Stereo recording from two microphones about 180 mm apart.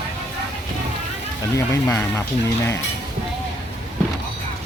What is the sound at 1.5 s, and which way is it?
Speech, 15° left (ahead or behind).